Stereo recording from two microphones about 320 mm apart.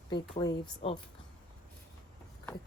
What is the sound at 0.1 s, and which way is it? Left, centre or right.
Speech, centre.